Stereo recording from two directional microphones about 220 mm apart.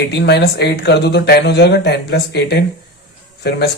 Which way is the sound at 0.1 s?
50° left (ahead or behind).